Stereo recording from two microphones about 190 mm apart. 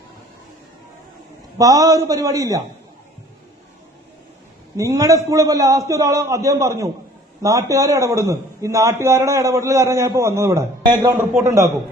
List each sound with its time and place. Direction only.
1.5 s a man's voice: 20° right (ahead or behind)
4.8 s a man's voice: 15° right (ahead or behind)